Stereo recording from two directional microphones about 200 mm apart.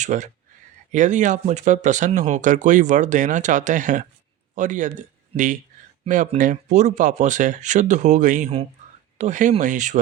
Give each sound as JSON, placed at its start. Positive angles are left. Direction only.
{"t": 0.0, "sound": "speech", "side_deg": -40}